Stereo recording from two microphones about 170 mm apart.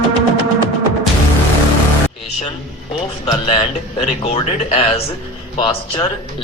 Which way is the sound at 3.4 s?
35° left (ahead or behind).